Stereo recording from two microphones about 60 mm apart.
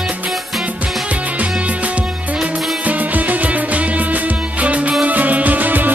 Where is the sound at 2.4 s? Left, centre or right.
Right.